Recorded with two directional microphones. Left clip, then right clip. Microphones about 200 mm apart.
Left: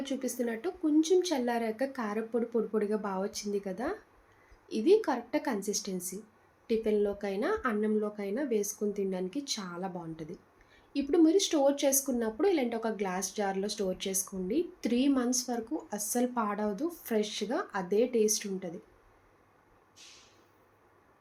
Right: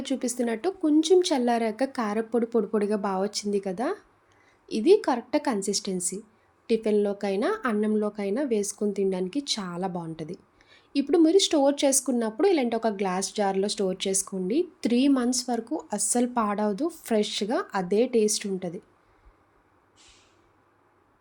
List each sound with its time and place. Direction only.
0.0 s speech: 55° right (ahead or behind)